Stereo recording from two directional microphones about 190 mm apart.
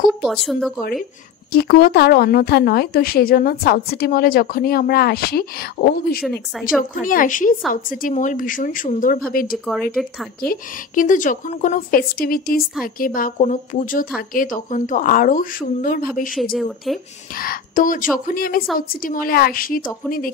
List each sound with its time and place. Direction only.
0.2 s speech: centre (ahead or behind)
1.5 s speech: 55° left (ahead or behind)
10.0 s speech: centre (ahead or behind)
10.4 s speech: 45° left (ahead or behind)
16.5 s speech: centre (ahead or behind)
17.4 s speech: 50° left (ahead or behind)